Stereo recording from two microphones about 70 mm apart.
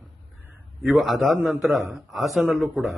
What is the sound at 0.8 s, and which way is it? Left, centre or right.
A man's voice, centre.